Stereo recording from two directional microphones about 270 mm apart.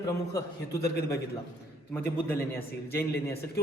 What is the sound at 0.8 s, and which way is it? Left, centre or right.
Speech, left.